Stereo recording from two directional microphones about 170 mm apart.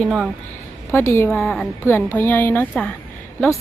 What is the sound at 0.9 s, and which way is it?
Speech, 15° left (ahead or behind).